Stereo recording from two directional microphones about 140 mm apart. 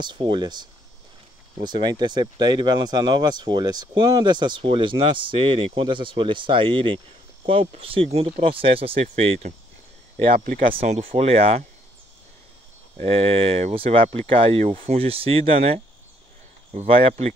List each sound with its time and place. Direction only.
0.0 s speech: 35° right (ahead or behind)
10.3 s speech: 90° right
10.7 s speech: 45° right (ahead or behind)
13.0 s speech: 45° right (ahead or behind)